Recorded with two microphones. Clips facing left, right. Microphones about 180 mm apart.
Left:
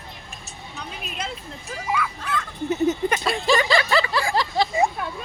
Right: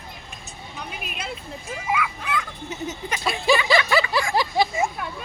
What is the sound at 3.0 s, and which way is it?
Speech, 50° left (ahead or behind).